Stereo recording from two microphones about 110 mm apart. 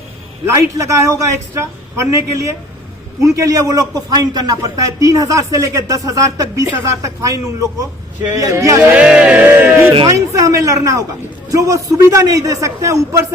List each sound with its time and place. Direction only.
0.8 s a man's voice: 30° right (ahead or behind)
9.0 s music: 10° right (ahead or behind)
10.1 s a man's voice: 30° right (ahead or behind)